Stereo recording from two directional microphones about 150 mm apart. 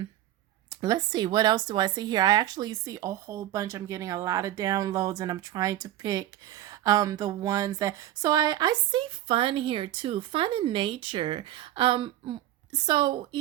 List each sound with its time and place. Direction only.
0.7 s speech: 25° right (ahead or behind)